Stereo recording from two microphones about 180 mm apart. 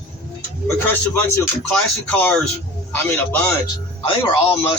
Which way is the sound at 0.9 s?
10° left (ahead or behind).